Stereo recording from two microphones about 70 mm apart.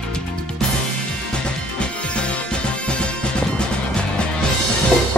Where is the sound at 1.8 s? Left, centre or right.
Centre.